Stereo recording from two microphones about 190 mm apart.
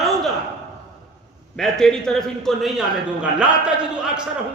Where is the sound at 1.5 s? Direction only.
Centre (ahead or behind).